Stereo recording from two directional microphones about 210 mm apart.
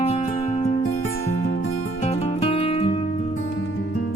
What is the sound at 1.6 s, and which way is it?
Music, 90° left.